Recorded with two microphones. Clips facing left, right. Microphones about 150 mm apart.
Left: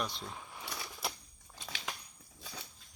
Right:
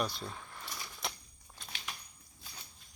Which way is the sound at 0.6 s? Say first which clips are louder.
Left 4 dB; 70° left (ahead or behind).